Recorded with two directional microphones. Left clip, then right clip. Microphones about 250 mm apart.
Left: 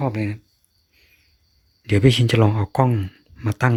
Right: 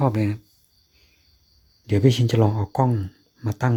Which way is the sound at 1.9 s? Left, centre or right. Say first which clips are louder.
Left 3 dB; centre.